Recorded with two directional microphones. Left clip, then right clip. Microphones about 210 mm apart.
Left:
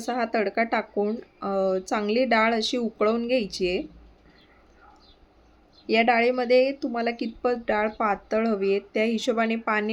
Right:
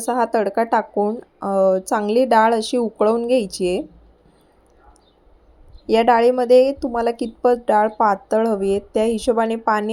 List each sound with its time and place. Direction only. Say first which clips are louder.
0.0 s speech: right 7 dB; 20° right (ahead or behind)
5.8 s a woman's voice: right 7 dB; 20° right (ahead or behind)